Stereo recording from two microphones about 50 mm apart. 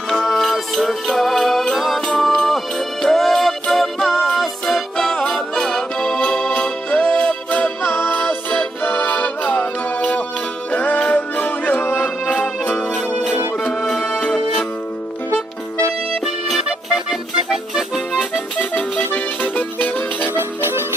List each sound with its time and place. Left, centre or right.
0.1 s music: centre; by 7.6 s left
7.8 s music: left
8.1 s music: left; by 14.2 s centre
16.6 s music: centre
18.3 s music: left
20.3 s music: right